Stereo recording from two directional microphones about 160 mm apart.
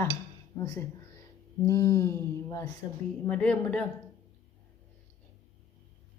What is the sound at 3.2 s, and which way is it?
Speech, 10° left (ahead or behind).